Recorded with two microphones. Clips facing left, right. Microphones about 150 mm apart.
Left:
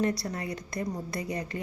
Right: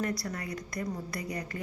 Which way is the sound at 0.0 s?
25° left (ahead or behind).